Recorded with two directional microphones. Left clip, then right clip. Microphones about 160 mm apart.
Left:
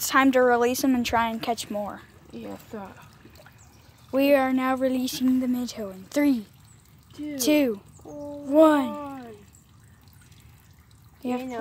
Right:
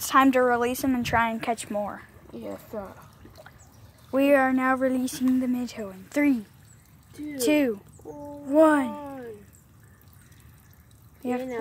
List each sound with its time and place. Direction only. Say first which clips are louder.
0.0 s a woman's voice: right 1 dB; centre (ahead or behind)
0.4 s speech: left 2 dB; 20° left (ahead or behind)
1.1 s speech: even; 5° left (ahead or behind)
2.3 s speech: right 2 dB; 35° left (ahead or behind)
4.1 s speech: even; 5° left (ahead or behind)
11.2 s speech: even; 15° left (ahead or behind)